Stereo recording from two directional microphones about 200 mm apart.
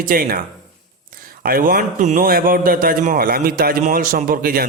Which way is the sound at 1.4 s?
45° right (ahead or behind).